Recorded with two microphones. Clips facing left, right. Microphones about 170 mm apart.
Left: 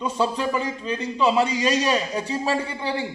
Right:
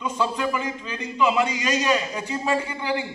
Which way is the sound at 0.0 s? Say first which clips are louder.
Left 1 dB; 30° left (ahead or behind).